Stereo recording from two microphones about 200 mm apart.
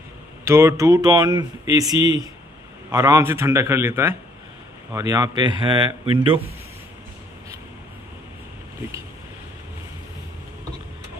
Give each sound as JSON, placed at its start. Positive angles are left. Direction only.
{"t": 0.5, "sound": "speech", "side_deg": -15}